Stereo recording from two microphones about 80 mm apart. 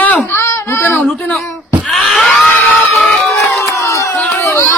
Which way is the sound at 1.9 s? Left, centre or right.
Centre.